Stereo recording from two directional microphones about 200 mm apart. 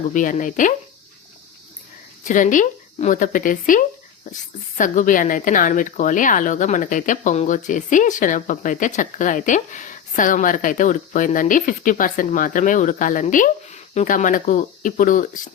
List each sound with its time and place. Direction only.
0.1 s speech: 40° left (ahead or behind)
2.2 s speech: 40° left (ahead or behind)